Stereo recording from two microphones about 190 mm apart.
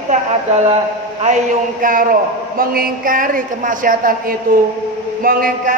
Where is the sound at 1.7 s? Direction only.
45° right (ahead or behind).